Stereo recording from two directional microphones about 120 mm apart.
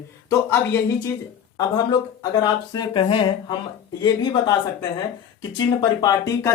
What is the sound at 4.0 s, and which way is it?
Speech, 35° left (ahead or behind).